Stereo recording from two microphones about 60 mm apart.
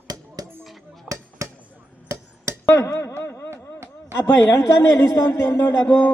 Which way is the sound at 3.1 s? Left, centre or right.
Left.